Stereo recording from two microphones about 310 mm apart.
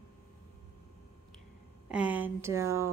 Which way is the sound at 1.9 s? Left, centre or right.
Centre.